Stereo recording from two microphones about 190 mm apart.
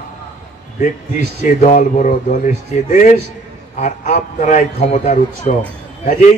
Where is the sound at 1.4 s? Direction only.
40° left (ahead or behind).